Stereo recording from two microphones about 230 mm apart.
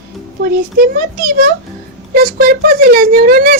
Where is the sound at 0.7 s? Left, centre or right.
Right.